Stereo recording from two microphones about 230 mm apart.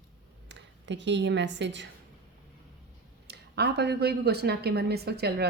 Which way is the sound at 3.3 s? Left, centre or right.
Right.